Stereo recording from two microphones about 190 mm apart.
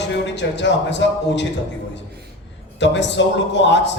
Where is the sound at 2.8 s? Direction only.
70° left (ahead or behind).